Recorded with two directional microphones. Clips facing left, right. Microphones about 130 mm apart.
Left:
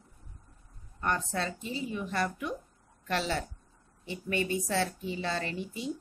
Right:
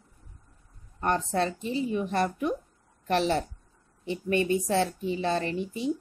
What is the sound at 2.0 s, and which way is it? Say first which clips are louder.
A woman's voice: right 5 dB; 25° right (ahead or behind).